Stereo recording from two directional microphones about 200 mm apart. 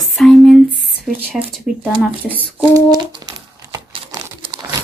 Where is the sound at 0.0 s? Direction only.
Centre (ahead or behind).